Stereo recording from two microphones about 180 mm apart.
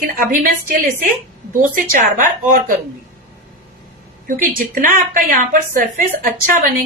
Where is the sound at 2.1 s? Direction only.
50° right (ahead or behind).